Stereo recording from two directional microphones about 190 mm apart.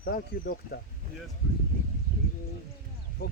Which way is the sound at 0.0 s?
50° left (ahead or behind).